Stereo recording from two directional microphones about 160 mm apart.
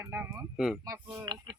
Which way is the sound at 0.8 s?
20° right (ahead or behind).